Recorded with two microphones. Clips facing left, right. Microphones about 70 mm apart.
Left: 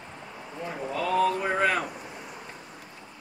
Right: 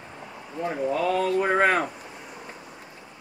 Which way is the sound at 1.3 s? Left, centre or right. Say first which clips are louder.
Right 4 dB; right.